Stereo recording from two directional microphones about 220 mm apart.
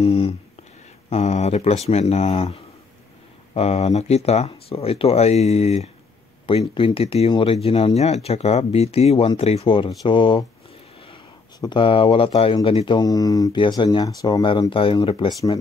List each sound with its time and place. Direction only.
0.0 s speech: 25° left (ahead or behind)
11.6 s speech: 25° left (ahead or behind)